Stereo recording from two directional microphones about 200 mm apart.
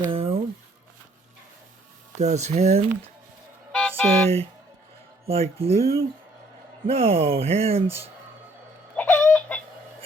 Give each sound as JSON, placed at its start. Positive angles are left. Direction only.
{"t": 0.1, "sound": "a sound", "side_deg": -30}
{"t": 2.1, "sound": "speech", "side_deg": -35}
{"t": 3.7, "sound": "music", "side_deg": 5}
{"t": 5.2, "sound": "speech", "side_deg": -30}
{"t": 9.0, "sound": "chicken", "side_deg": 5}